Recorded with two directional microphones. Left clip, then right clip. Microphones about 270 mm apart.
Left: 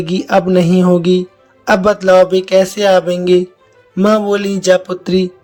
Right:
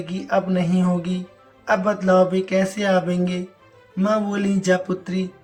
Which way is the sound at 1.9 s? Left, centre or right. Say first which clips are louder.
Left 9 dB; left.